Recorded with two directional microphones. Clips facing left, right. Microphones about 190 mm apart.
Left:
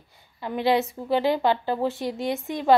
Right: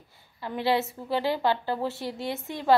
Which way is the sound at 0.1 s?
20° left (ahead or behind).